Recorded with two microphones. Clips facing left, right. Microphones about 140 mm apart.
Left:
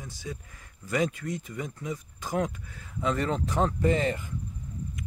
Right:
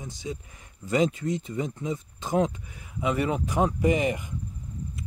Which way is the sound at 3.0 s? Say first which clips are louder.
Right 2 dB; 10° right (ahead or behind).